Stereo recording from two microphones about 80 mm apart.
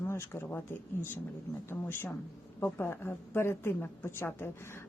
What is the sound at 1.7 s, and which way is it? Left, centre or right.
A woman's voice, left.